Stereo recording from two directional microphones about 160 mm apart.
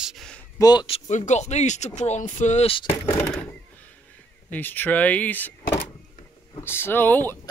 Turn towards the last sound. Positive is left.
turn(degrees=10)  # may be behind; listen again after turning